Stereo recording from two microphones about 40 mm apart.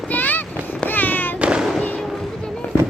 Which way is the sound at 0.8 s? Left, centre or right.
Left.